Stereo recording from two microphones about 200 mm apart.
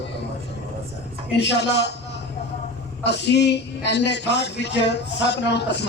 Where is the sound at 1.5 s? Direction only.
60° left (ahead or behind).